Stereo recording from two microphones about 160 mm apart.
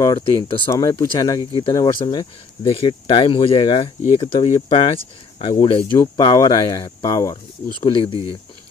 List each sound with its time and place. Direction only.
0.0 s speech: 25° left (ahead or behind)
2.6 s speech: 35° left (ahead or behind)
5.9 s speech: 20° left (ahead or behind)
7.8 s speech: 35° left (ahead or behind)